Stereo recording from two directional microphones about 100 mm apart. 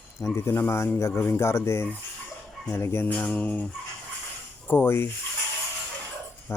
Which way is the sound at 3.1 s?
15° left (ahead or behind).